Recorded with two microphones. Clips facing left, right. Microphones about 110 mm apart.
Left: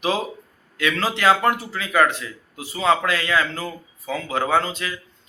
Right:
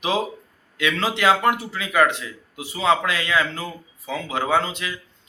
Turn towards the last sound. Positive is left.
turn(degrees=-20)  # may be behind; listen again after turning